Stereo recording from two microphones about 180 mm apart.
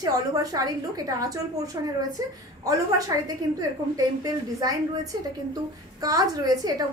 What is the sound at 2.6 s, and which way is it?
A woman's voice, 20° right (ahead or behind).